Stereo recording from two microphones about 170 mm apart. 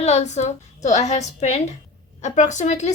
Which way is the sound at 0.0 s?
40° left (ahead or behind).